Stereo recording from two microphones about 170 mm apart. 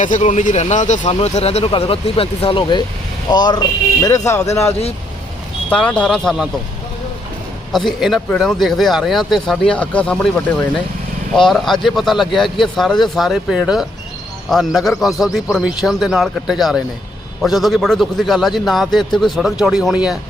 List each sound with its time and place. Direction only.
0.0 s a man's voice: 45° left (ahead or behind); by 6.5 s 5° left (ahead or behind)
7.7 s a man's voice: centre (ahead or behind)